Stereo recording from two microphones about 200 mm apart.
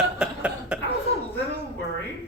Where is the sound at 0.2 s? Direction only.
5° right (ahead or behind).